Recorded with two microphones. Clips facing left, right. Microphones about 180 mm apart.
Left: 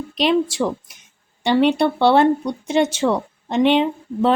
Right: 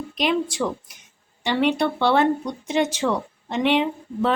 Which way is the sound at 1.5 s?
30° left (ahead or behind).